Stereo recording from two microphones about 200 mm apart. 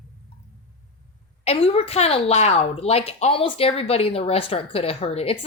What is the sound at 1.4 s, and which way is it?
A woman's voice, 30° left (ahead or behind).